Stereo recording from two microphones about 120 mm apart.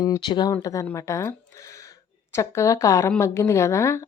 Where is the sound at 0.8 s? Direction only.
25° left (ahead or behind).